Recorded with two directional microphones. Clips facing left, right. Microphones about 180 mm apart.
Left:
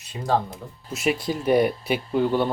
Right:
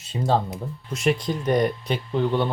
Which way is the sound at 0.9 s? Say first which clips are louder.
Right 1 dB; 5° left (ahead or behind).